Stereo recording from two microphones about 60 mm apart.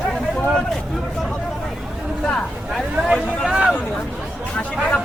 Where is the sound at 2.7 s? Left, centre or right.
Centre.